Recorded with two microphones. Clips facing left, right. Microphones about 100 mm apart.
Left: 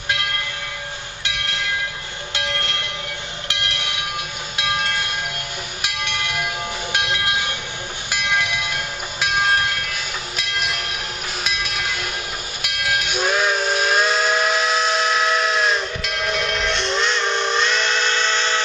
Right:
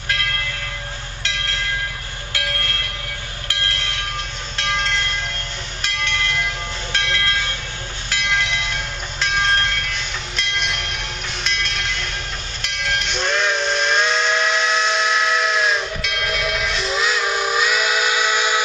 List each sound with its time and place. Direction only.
1.2 s train: 15° left (ahead or behind)
12.6 s steam whistle: 10° left (ahead or behind); by 18.6 s 10° right (ahead or behind)